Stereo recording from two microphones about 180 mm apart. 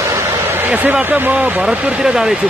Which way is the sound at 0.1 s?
10° right (ahead or behind).